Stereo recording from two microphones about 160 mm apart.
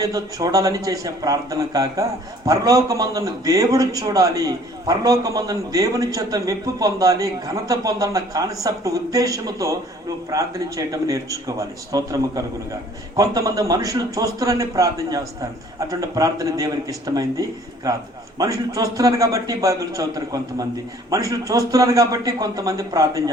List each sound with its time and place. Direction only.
0.0 s speech: 20° right (ahead or behind)